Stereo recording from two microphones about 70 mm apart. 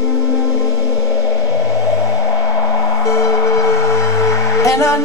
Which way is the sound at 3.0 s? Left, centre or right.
Left.